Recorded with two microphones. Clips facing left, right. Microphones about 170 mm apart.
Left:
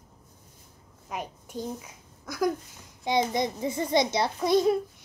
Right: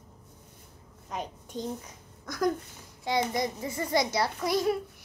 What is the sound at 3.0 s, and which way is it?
A child's voice, 20° left (ahead or behind).